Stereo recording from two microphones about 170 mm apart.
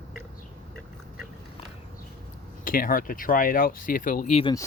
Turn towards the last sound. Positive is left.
turn(degrees=25)  # may be behind; listen again after turning